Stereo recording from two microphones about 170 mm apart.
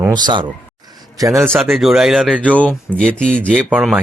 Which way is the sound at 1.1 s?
20° right (ahead or behind).